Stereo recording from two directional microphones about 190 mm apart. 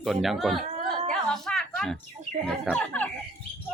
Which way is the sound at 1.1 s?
5° left (ahead or behind).